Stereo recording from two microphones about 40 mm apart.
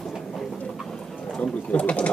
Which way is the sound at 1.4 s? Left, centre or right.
Left.